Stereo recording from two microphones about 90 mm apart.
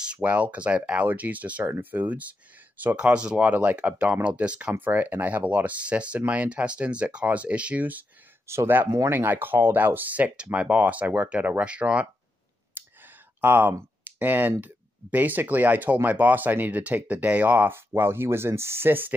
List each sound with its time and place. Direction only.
0.0 s speech: 15° right (ahead or behind)
8.5 s speech: 25° right (ahead or behind)